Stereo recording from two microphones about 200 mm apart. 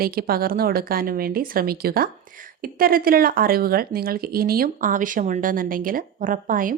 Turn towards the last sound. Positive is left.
turn(degrees=-45)  # may be behind; listen again after turning